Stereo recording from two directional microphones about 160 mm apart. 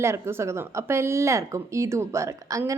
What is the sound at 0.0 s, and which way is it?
Speech, 15° right (ahead or behind).